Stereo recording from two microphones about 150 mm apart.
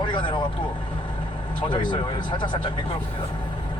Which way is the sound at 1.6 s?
30° left (ahead or behind).